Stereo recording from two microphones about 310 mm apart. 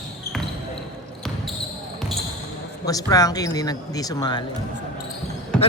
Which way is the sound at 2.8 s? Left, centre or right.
Centre.